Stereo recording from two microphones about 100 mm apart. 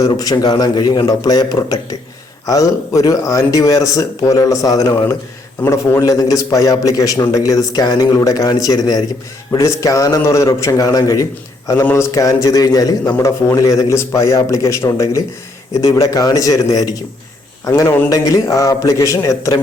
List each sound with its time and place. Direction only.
0.0 s a man's voice: 40° left (ahead or behind)
17.7 s a man's voice: 25° left (ahead or behind)
18.1 s a man's voice: 35° left (ahead or behind)